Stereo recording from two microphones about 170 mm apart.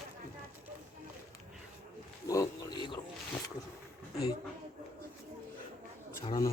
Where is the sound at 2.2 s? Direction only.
20° left (ahead or behind).